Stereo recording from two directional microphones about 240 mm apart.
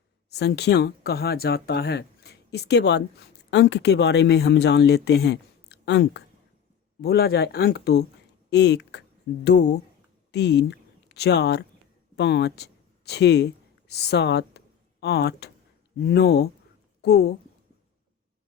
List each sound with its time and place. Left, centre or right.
0.3 s speech: left